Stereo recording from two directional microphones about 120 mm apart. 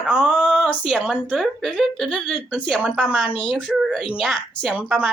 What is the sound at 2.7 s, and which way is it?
Speech, 5° left (ahead or behind).